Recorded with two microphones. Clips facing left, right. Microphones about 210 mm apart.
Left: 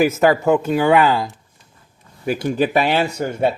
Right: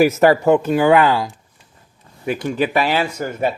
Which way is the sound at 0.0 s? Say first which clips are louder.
Right 2 dB; 5° right (ahead or behind).